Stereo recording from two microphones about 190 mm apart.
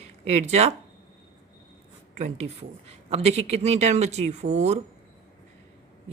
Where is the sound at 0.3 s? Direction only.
35° right (ahead or behind).